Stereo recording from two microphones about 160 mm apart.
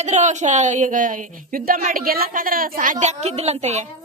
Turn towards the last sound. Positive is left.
turn(degrees=-45)  # may be behind; listen again after turning